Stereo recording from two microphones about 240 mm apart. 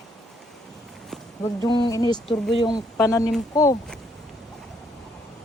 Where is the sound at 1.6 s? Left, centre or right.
Centre.